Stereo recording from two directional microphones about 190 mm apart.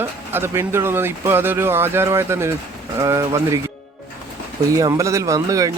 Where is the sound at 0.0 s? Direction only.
10° right (ahead or behind).